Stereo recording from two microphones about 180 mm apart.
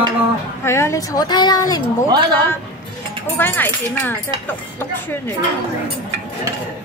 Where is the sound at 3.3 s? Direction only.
10° left (ahead or behind).